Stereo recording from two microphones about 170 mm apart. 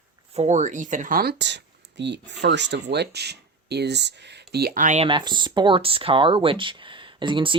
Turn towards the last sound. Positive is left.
turn(degrees=-30)  # may be behind; listen again after turning